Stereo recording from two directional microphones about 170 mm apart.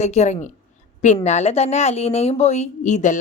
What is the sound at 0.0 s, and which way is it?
A woman's voice, 40° left (ahead or behind).